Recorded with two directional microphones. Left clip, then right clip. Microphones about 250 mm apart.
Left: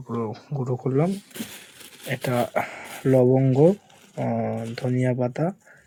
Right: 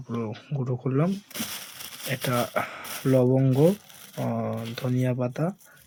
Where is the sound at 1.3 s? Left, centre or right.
Right.